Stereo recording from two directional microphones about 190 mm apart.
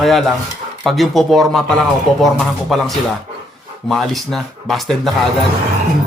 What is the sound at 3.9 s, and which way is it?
A man's voice, centre (ahead or behind).